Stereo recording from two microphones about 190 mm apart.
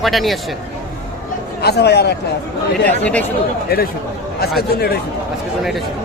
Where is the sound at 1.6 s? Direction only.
60° left (ahead or behind).